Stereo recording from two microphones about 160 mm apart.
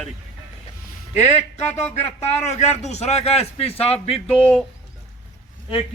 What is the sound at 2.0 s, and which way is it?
A man's voice, 45° left (ahead or behind).